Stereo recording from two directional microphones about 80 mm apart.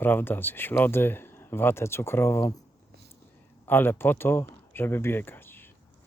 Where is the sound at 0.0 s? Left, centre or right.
Left.